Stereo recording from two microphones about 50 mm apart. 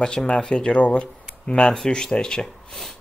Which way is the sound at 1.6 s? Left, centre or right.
Centre.